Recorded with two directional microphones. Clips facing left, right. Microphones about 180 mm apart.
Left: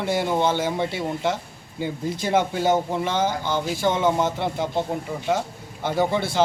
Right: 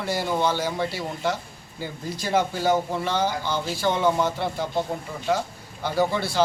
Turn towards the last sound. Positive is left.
turn(degrees=20)  # may be behind; listen again after turning